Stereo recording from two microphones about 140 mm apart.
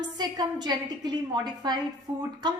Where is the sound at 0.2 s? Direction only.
30° right (ahead or behind).